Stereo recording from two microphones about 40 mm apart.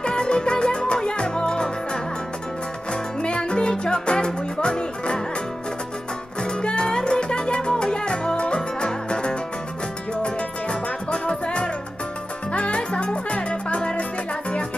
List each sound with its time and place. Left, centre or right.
0.0 s music: left
6.4 s music: left